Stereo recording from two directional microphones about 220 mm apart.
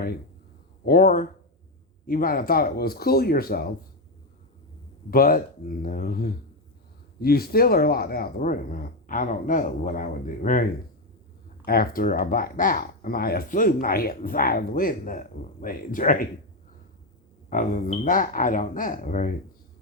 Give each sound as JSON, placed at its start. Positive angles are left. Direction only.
{"t": 0.9, "sound": "speech", "side_deg": 40}
{"t": 5.1, "sound": "speech", "side_deg": 40}
{"t": 17.5, "sound": "speech", "side_deg": 35}